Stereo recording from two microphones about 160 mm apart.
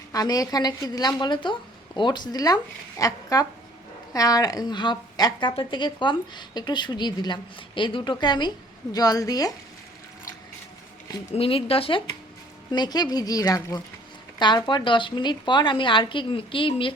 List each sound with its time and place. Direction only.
0.1 s a woman's voice: 20° left (ahead or behind)
11.3 s a woman's voice: 35° left (ahead or behind)